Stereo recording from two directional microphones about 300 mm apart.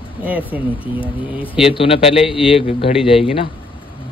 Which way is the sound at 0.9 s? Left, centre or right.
Centre.